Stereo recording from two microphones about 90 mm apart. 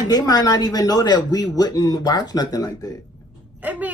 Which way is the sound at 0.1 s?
50° left (ahead or behind).